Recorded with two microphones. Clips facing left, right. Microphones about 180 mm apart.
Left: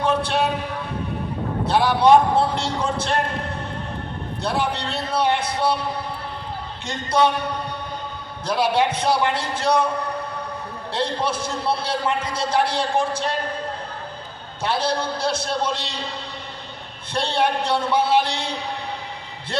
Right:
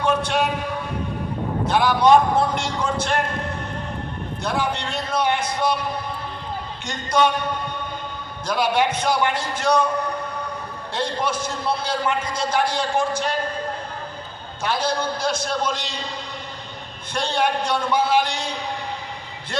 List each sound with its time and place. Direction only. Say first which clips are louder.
0.0 s a man's voice: even; 35° left (ahead or behind)
1.6 s a man's voice: left 1 dB; 30° left (ahead or behind)
4.4 s a man's voice: left 1 dB; 35° left (ahead or behind)
6.8 s a man's voice: left 1 dB; 30° left (ahead or behind)
8.4 s a man's voice: left 1 dB; 30° left (ahead or behind)
10.9 s a man's voice: left 1 dB; 30° left (ahead or behind)
14.6 s a man's voice: even; 30° left (ahead or behind)
17.2 s a man's voice: left 1 dB; 30° left (ahead or behind)